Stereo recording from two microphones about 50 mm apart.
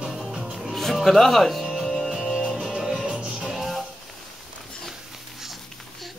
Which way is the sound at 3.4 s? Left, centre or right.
Centre.